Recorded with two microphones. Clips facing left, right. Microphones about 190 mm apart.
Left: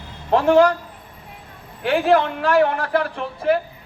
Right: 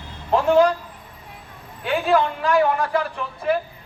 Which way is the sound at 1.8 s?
65° left (ahead or behind).